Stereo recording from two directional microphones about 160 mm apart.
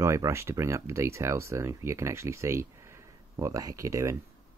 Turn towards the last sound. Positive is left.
turn(degrees=-20)  # may be behind; listen again after turning